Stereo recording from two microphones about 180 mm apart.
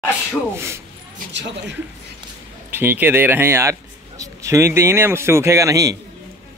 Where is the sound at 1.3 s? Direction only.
80° right.